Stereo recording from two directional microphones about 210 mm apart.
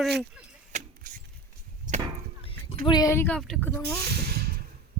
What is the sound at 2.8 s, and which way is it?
A woman's voice, 20° left (ahead or behind).